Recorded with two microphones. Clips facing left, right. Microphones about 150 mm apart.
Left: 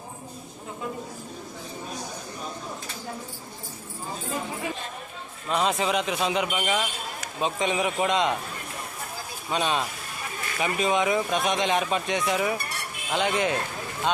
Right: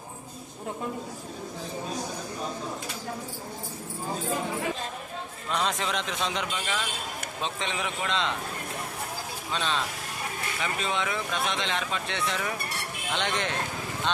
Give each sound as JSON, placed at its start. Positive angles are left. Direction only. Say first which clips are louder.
{"t": 5.5, "sound": "a man's voice", "louder": "left 5 dB", "side_deg": 5}
{"t": 9.5, "sound": "speech", "louder": "left 4 dB", "side_deg": 15}